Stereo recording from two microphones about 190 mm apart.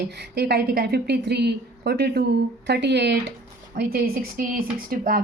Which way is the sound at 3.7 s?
50° right (ahead or behind).